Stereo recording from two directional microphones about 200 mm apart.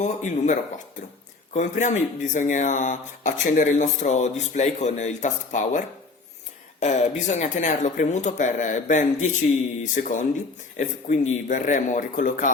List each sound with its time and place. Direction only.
0.0 s speech: 40° left (ahead or behind)